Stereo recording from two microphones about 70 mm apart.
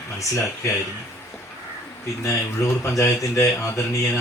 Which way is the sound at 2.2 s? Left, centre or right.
Left.